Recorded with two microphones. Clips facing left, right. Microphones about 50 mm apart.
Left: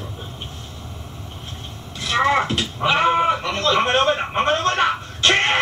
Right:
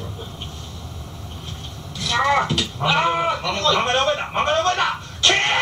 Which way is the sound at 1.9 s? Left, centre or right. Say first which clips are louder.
Left 1 dB; left.